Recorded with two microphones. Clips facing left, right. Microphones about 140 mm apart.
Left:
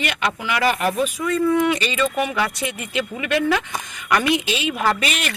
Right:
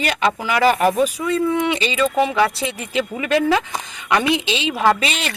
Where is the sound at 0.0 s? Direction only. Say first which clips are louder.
Right 4 dB; 35° right (ahead or behind).